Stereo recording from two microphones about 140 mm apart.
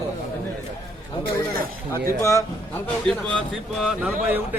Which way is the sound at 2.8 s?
10° left (ahead or behind).